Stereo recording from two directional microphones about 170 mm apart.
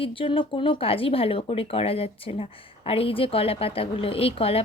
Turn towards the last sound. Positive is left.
turn(degrees=35)  # may be behind; listen again after turning